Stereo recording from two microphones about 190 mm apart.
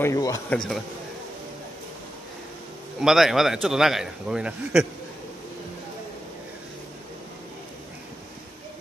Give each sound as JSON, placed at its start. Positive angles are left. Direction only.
{"t": 0.0, "sound": "speech", "side_deg": 15}
{"t": 0.5, "sound": "a man's voice", "side_deg": 0}
{"t": 3.0, "sound": "a man's voice", "side_deg": 0}